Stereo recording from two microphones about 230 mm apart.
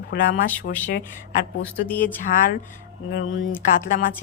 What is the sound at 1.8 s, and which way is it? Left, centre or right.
Speech, centre.